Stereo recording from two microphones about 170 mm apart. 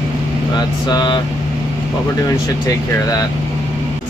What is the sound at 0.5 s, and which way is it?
Speech, 25° left (ahead or behind).